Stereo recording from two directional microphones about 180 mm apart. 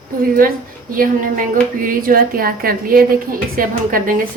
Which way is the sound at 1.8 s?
50° right (ahead or behind).